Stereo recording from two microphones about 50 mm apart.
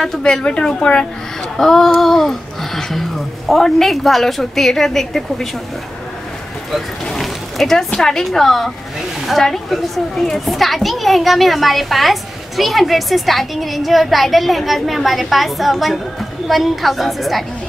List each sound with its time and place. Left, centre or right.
0.2 s a woman's voice: centre
7.1 s a child's voice: centre